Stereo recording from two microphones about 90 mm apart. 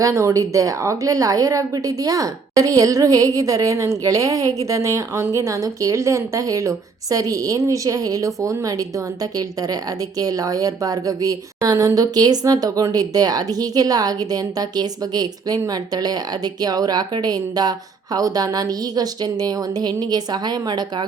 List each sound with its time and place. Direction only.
0.0 s a woman's voice: 35° right (ahead or behind)